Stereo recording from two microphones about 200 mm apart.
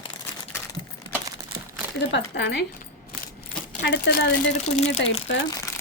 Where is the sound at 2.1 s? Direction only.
60° left (ahead or behind).